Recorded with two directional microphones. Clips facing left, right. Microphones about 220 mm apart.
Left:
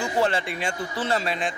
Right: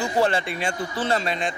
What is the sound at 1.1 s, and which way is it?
Speech, 5° left (ahead or behind).